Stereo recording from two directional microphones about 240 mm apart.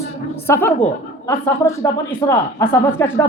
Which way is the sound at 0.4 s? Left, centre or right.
Centre.